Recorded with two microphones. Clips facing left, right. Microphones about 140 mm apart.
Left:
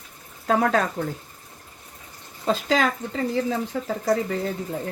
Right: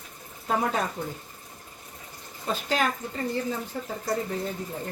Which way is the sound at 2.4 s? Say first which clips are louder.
Left 5 dB; 90° left.